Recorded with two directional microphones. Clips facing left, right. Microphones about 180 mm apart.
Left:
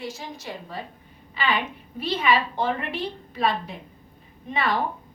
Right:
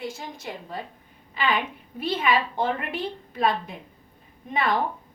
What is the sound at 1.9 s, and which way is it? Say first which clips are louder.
A woman's voice: left 1 dB; 50° right (ahead or behind).